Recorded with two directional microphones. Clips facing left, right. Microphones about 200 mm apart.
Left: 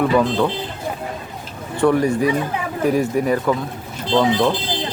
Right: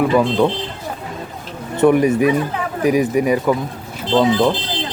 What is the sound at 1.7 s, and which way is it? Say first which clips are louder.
A man's voice: right 3 dB; 20° right (ahead or behind).